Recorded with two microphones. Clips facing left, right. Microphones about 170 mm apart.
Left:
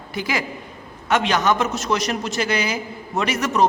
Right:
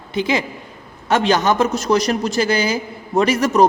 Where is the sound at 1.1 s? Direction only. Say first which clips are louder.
Right 3 dB; 35° right (ahead or behind).